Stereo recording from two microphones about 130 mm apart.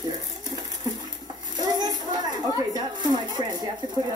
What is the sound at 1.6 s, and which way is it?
Child singing, 30° right (ahead or behind).